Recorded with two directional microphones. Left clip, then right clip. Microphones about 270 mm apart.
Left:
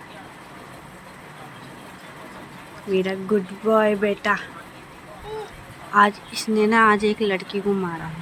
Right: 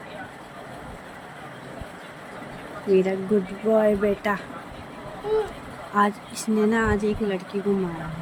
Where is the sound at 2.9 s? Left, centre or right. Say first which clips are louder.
Right 1 dB; centre.